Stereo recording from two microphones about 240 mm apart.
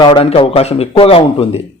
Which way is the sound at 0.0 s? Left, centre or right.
Centre.